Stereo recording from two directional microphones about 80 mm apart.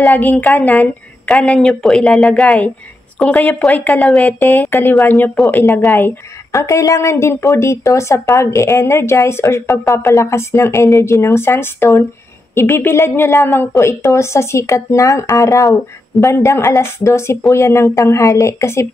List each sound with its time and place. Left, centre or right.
0.2 s a woman's voice: left
4.3 s a woman's voice: left
6.5 s speech: left